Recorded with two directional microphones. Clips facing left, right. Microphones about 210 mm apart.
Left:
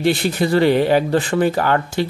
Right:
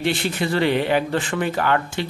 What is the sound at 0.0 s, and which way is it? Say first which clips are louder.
A man's voice: left 5 dB; 40° left (ahead or behind).